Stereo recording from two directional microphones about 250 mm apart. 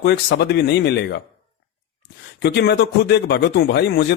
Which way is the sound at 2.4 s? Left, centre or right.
Left.